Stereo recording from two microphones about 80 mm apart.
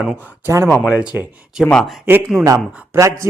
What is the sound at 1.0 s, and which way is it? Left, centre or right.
Speech, centre.